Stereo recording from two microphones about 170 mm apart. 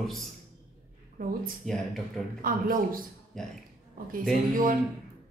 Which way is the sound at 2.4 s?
55° right (ahead or behind).